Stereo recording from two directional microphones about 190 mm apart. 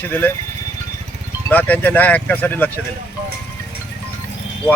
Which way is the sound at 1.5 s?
10° left (ahead or behind).